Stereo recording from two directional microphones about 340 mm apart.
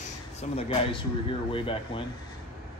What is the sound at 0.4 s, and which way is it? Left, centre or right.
Speech, centre.